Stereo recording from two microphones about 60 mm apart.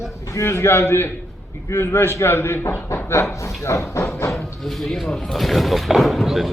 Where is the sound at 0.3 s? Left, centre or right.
Left.